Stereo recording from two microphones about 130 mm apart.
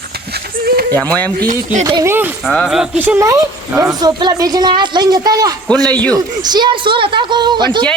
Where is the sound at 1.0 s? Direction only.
10° left (ahead or behind).